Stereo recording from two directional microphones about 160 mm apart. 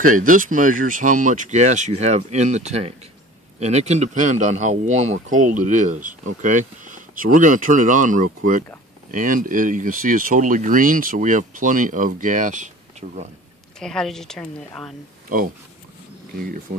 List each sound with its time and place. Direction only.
0.0 s speech: 55° right (ahead or behind)
13.7 s a woman's voice: 5° left (ahead or behind)
15.3 s speech: 60° right (ahead or behind)